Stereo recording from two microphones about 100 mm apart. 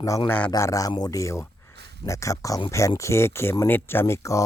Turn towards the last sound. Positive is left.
turn(degrees=30)  # may be behind; listen again after turning